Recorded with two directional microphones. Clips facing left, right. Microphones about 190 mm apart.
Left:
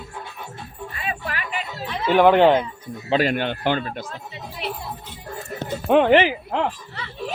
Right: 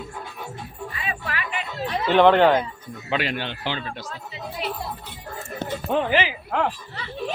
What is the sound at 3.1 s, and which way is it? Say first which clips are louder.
Speech: left 6 dB; 40° left (ahead or behind).